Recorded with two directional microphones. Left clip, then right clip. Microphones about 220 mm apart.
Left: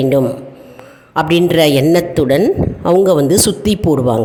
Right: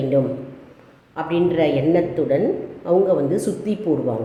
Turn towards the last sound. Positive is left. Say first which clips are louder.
# left 8 dB
turn(degrees=50)  # may be behind; listen again after turning